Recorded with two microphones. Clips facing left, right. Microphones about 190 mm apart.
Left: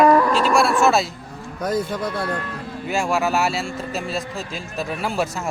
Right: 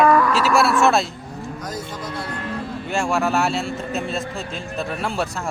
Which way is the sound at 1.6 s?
60° left (ahead or behind).